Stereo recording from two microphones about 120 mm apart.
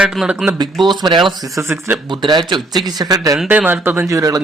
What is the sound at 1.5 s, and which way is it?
Speech, 20° right (ahead or behind).